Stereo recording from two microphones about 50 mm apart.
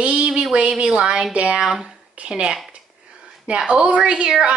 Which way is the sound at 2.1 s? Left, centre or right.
Right.